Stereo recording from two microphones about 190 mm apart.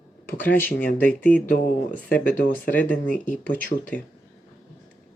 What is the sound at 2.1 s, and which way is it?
Speech, 10° left (ahead or behind).